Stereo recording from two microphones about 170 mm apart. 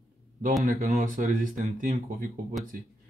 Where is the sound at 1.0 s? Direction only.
55° right (ahead or behind).